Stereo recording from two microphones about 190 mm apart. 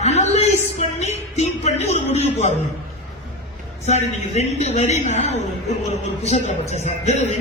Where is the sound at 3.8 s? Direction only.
35° left (ahead or behind).